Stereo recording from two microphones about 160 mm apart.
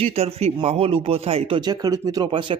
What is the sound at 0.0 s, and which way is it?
Speech, 40° right (ahead or behind).